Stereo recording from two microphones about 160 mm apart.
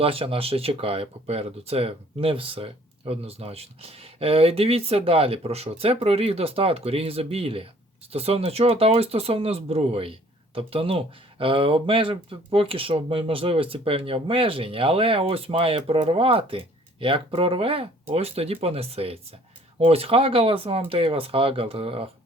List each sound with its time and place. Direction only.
0.0 s speech: 35° right (ahead or behind)